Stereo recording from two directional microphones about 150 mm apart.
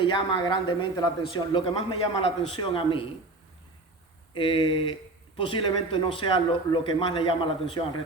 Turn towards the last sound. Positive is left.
turn(degrees=35)  # may be behind; listen again after turning